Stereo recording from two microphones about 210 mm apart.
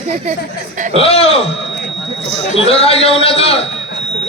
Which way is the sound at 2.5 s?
30° left (ahead or behind).